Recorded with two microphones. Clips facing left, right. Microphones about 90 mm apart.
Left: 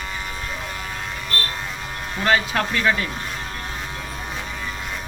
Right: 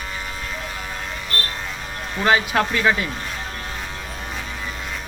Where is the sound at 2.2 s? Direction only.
15° right (ahead or behind).